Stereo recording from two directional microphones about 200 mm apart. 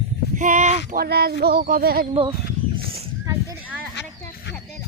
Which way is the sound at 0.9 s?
50° right (ahead or behind).